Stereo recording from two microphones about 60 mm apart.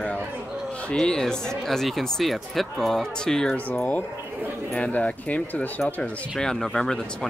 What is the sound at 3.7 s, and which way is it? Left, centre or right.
Speech, left.